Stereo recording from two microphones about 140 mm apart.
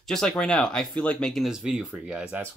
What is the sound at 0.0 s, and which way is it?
Speech, 5° left (ahead or behind).